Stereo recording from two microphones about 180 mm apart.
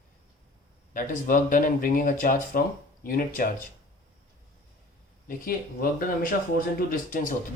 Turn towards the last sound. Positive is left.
turn(degrees=50)  # may be behind; listen again after turning